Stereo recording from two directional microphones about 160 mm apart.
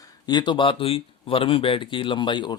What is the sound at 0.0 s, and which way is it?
Speech, 25° left (ahead or behind).